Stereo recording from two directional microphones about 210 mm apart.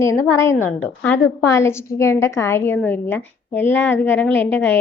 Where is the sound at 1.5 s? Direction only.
15° left (ahead or behind).